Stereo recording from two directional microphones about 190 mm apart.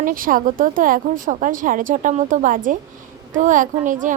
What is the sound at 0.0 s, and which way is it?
A woman's voice, 45° right (ahead or behind).